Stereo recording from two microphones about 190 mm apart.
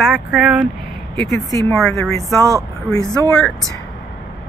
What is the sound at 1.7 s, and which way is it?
Speech, centre (ahead or behind).